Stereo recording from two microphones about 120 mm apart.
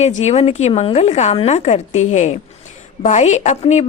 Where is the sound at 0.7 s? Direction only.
55° left (ahead or behind).